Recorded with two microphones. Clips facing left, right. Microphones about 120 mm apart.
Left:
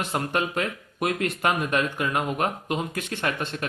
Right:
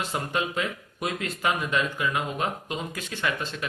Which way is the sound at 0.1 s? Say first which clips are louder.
Left 2 dB; 55° left (ahead or behind).